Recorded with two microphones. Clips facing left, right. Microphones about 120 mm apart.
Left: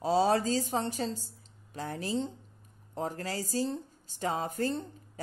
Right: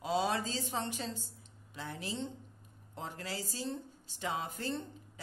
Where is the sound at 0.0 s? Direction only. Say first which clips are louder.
Left 7 dB; 35° left (ahead or behind).